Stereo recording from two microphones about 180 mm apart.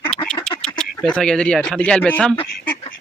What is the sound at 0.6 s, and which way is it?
Speech, 5° left (ahead or behind).